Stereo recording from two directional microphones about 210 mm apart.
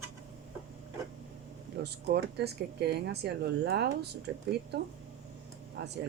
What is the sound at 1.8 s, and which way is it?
Speech, 50° right (ahead or behind).